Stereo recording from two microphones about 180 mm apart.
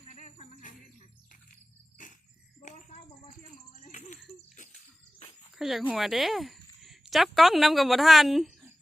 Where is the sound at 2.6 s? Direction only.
45° left (ahead or behind).